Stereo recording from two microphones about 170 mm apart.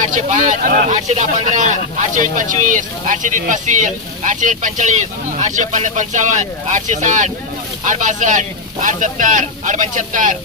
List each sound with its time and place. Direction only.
0.0 s speech: 50° right (ahead or behind)